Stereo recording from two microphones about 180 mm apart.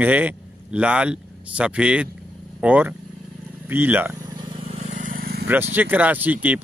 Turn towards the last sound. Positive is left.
turn(degrees=-10)  # may be behind; listen again after turning